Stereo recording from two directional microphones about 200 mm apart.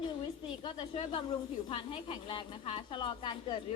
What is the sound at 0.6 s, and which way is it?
A woman's voice, 25° left (ahead or behind).